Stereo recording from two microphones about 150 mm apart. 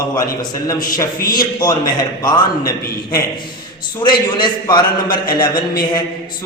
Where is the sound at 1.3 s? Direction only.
25° left (ahead or behind).